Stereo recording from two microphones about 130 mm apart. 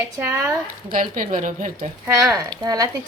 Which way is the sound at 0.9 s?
90° right.